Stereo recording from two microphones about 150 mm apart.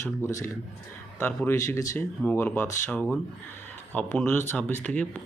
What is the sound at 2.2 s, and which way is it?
Speech, 15° left (ahead or behind).